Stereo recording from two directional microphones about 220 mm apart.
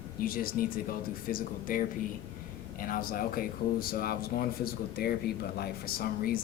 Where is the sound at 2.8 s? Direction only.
40° left (ahead or behind).